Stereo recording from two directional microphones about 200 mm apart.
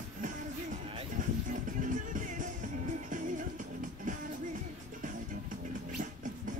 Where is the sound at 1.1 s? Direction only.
40° right (ahead or behind).